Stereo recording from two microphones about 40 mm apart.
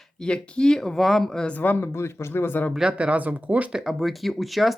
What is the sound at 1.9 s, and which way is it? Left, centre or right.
Speech, left.